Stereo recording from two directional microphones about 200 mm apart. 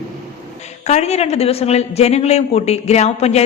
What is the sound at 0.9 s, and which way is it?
A man's voice, 35° left (ahead or behind).